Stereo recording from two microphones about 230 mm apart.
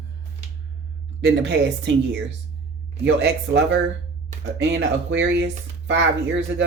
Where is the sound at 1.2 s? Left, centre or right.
Right.